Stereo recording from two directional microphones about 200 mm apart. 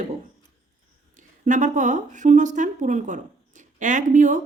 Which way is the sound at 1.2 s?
40° right (ahead or behind).